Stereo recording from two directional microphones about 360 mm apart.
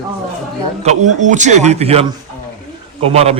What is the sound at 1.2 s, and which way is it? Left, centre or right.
A man's voice, centre.